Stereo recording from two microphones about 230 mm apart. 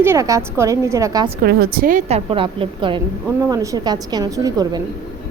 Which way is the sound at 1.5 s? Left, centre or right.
Right.